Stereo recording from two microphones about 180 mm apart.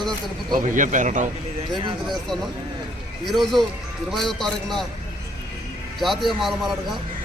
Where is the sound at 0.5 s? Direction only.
45° right (ahead or behind).